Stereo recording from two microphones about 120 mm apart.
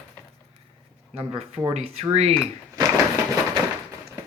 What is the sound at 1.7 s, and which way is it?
Speech, 65° right (ahead or behind).